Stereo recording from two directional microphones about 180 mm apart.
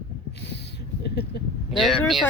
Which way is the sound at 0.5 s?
70° left (ahead or behind).